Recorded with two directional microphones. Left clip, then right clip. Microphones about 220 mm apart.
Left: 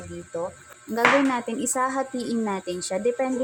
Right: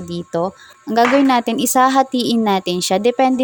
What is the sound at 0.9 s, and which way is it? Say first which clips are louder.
A woman's voice: right 7 dB; 35° right (ahead or behind).